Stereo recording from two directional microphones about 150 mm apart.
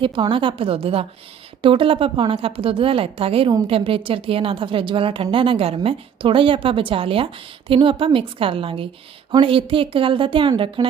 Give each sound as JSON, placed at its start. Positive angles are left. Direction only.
{"t": 0.0, "sound": "a woman's voice", "side_deg": -35}